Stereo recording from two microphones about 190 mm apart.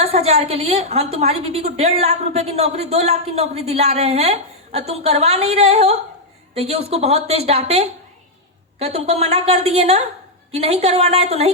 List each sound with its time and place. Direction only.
0.0 s a woman's voice: 35° right (ahead or behind)